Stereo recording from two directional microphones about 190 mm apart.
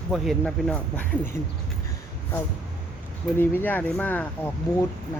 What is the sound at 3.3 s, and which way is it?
Speech, 10° left (ahead or behind).